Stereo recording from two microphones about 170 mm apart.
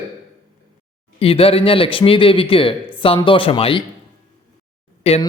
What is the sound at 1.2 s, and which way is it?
A man's voice, 35° left (ahead or behind).